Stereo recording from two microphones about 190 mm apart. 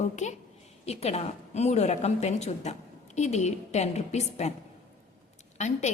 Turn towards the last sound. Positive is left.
turn(degrees=40)  # may be behind; listen again after turning